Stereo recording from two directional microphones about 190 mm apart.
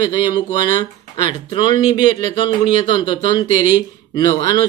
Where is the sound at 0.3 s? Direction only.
45° right (ahead or behind).